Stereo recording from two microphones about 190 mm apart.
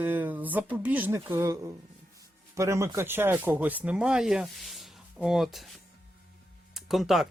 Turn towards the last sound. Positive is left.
turn(degrees=0)  # may be behind; listen again after turning